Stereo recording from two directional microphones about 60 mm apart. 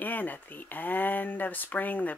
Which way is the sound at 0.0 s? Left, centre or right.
Left.